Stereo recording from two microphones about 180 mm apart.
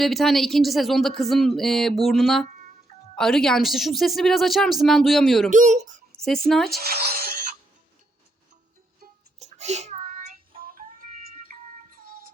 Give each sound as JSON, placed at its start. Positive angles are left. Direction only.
{"t": 0.0, "sound": "speech", "side_deg": 0}
{"t": 5.5, "sound": "a child's voice", "side_deg": -45}
{"t": 6.2, "sound": "speech", "side_deg": 0}
{"t": 6.7, "sound": "music", "side_deg": -55}
{"t": 9.4, "sound": "child singing", "side_deg": -40}
{"t": 10.6, "sound": "music", "side_deg": -50}